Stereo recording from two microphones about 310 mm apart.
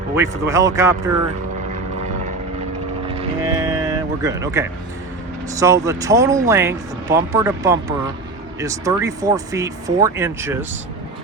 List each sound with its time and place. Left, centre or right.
0.2 s speech: centre
3.2 s music: centre
5.5 s speech: centre